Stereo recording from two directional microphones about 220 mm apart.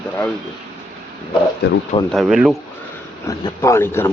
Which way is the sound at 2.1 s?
Centre (ahead or behind).